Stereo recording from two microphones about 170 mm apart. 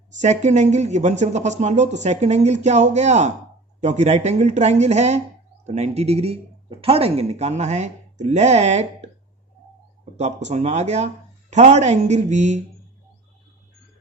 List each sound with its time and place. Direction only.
0.2 s speech: 45° right (ahead or behind)
10.2 s speech: 40° right (ahead or behind)